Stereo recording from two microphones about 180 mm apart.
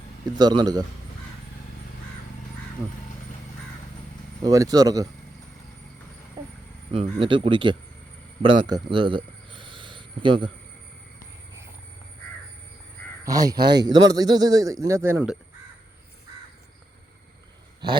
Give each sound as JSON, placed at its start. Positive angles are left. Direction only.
{"t": 0.3, "sound": "a man's voice", "side_deg": -25}
{"t": 4.4, "sound": "a man's voice", "side_deg": -20}
{"t": 6.4, "sound": "a sound", "side_deg": -20}
{"t": 6.9, "sound": "a man's voice", "side_deg": -30}
{"t": 8.4, "sound": "a sound", "side_deg": -25}
{"t": 13.2, "sound": "a man's voice", "side_deg": -20}